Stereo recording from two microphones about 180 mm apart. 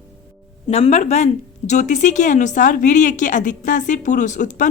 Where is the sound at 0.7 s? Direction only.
35° left (ahead or behind).